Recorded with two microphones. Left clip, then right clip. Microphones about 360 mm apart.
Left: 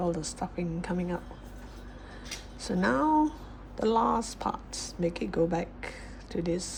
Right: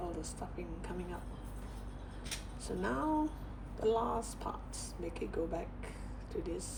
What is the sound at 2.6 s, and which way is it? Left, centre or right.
Speech, left.